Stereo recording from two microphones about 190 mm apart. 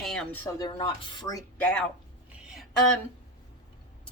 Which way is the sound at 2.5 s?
Centre (ahead or behind).